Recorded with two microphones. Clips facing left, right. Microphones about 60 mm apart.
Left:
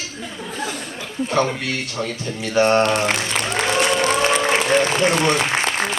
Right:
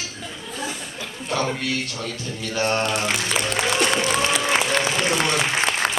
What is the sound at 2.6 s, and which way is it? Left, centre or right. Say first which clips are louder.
Speech: left 7 dB; left.